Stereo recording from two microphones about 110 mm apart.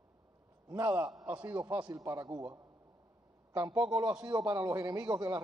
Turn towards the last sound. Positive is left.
turn(degrees=-30)  # may be behind; listen again after turning